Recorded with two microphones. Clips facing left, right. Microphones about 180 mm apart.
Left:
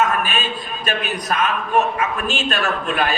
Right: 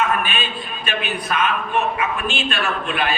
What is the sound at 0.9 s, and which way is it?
A man's voice, 40° left (ahead or behind).